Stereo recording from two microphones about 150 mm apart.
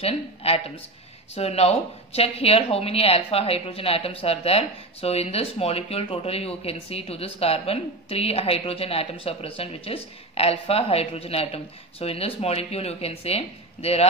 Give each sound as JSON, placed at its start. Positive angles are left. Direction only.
{"t": 0.0, "sound": "speech", "side_deg": 40}